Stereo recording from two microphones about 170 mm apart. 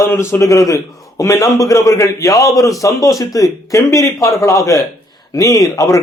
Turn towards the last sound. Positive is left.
turn(degrees=20)  # may be behind; listen again after turning